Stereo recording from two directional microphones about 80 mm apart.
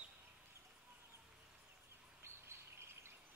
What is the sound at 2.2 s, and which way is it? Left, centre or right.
Bird, right.